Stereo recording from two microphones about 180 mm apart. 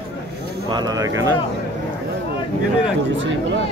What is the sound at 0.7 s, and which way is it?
Speech, 20° right (ahead or behind).